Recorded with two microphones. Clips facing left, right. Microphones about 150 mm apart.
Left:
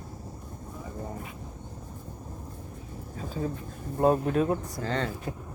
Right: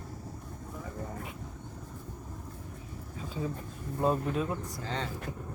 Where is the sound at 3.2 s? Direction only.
40° left (ahead or behind).